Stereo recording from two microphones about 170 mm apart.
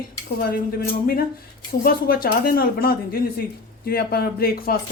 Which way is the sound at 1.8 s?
60° left (ahead or behind).